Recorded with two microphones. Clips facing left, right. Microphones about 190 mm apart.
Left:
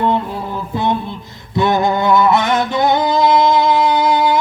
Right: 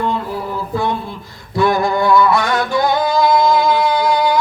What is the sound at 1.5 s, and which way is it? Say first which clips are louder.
Music: even; 20° left (ahead or behind).